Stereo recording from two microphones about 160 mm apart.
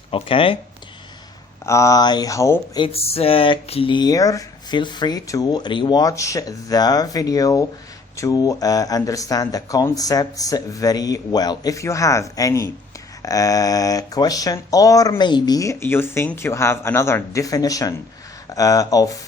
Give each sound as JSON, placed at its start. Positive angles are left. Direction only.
{"t": 0.1, "sound": "speech", "side_deg": 35}
{"t": 1.6, "sound": "speech", "side_deg": 20}
{"t": 2.8, "sound": "speech", "side_deg": 40}